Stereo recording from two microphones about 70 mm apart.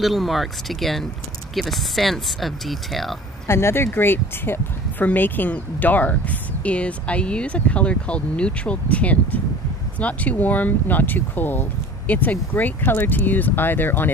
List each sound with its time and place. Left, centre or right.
0.0 s speech: centre
3.4 s speech: left